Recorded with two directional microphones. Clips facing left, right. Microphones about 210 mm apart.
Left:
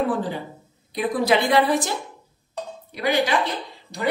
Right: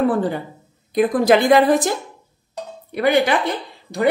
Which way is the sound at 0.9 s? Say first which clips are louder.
Right 6 dB; 50° right (ahead or behind).